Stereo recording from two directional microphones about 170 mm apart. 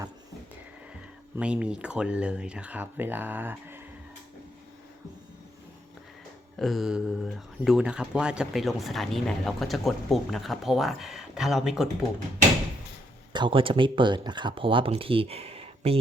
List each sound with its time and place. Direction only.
1.4 s speech: 5° right (ahead or behind)
6.6 s speech: centre (ahead or behind)
13.3 s speech: 30° right (ahead or behind)